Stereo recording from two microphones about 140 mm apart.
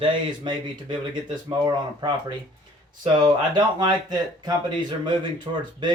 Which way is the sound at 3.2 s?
30° right (ahead or behind).